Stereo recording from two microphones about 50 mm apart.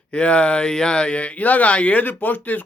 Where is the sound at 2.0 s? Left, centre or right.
Left.